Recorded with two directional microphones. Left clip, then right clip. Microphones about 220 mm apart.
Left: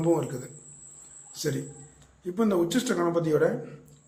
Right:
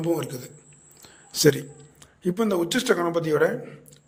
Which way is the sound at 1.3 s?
45° right (ahead or behind).